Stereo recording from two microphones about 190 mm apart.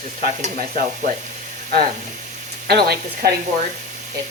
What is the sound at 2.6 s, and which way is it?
Speech, 55° right (ahead or behind).